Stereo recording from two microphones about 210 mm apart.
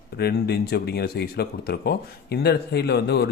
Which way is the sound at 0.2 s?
50° left (ahead or behind).